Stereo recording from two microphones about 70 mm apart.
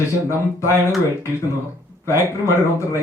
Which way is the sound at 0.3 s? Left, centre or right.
Left.